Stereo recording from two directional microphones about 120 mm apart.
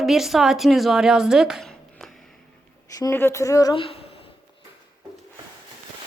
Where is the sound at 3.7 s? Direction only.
50° left (ahead or behind).